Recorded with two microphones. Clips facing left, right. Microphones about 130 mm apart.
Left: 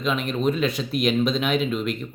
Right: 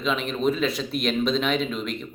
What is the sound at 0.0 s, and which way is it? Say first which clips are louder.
Speech: left 1 dB; centre (ahead or behind).